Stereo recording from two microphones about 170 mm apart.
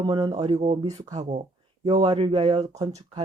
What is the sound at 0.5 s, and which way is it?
Speech, 35° right (ahead or behind).